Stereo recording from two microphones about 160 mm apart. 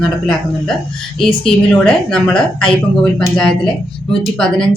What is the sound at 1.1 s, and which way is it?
A woman's voice, 5° left (ahead or behind).